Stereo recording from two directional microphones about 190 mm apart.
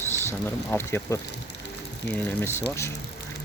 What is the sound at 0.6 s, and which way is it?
Speech, 15° left (ahead or behind).